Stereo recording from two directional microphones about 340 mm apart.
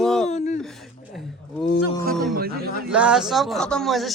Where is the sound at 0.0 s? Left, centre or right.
Centre.